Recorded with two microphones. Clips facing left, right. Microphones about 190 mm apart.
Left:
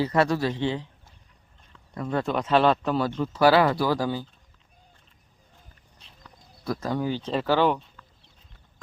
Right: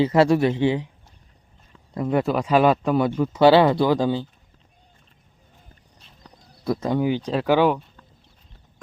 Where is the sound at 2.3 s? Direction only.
5° right (ahead or behind).